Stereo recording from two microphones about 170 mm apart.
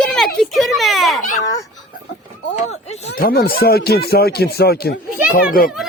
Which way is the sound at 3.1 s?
60° left (ahead or behind).